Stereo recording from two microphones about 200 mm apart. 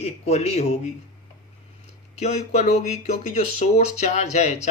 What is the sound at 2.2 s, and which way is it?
Speech, 35° left (ahead or behind).